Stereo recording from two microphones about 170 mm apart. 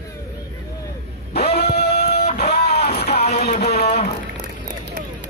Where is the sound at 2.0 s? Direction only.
40° left (ahead or behind).